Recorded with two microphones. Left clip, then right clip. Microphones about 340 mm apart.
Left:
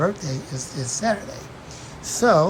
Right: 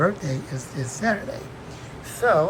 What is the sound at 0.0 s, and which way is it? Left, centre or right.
Speech, centre.